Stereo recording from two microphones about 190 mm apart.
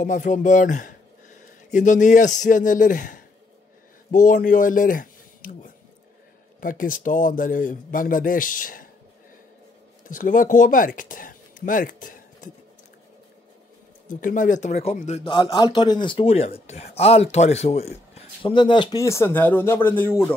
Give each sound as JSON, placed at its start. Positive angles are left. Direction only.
{"t": 0.0, "sound": "speech", "side_deg": 40}
{"t": 10.0, "sound": "speech", "side_deg": 45}
{"t": 14.0, "sound": "speech", "side_deg": 45}